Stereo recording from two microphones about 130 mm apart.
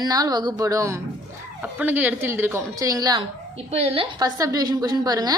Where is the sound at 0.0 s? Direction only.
30° right (ahead or behind).